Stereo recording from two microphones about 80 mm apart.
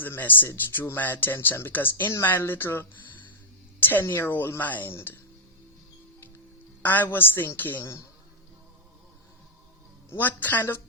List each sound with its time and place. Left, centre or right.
0.0 s speech: left
6.8 s speech: left
10.1 s speech: left